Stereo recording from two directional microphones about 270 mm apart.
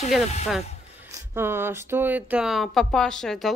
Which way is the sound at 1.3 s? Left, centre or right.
Centre.